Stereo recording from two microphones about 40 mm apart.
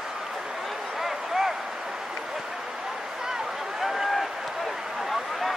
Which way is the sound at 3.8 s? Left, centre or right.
Centre.